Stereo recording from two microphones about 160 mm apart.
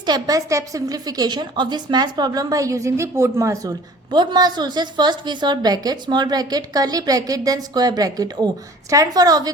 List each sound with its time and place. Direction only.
0.0 s a woman's voice: 25° right (ahead or behind)